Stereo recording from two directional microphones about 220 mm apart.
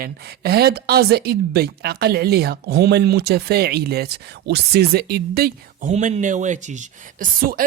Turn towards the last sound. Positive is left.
turn(degrees=-40)  # may be behind; listen again after turning